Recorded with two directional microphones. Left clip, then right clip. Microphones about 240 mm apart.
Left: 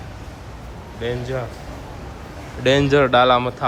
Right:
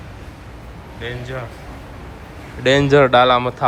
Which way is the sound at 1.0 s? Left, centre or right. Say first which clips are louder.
Left 3 dB; left.